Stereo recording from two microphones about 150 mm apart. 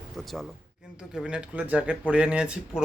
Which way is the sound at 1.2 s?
5° right (ahead or behind).